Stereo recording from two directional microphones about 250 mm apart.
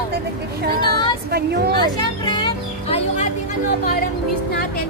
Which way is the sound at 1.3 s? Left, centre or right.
Right.